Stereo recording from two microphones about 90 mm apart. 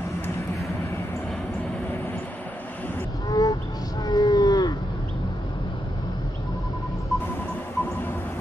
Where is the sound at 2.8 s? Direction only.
20° left (ahead or behind).